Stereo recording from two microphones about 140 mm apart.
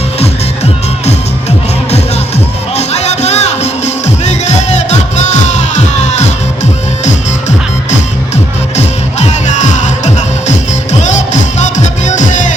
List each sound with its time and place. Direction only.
2.7 s music: 50° left (ahead or behind)
8.7 s music: 50° left (ahead or behind)